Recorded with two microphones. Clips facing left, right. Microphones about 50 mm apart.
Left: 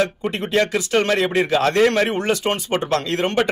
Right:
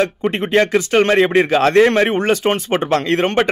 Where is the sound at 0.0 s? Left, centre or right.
Right.